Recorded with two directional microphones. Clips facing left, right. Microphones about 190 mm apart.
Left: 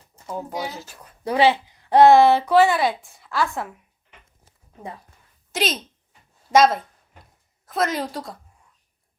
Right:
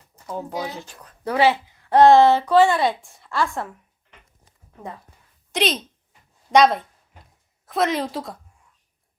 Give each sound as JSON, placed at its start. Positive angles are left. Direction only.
{"t": 0.3, "sound": "speech", "side_deg": 10}
{"t": 5.5, "sound": "a woman's voice", "side_deg": 0}